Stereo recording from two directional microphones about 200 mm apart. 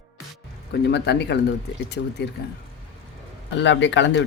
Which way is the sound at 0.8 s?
55° left (ahead or behind).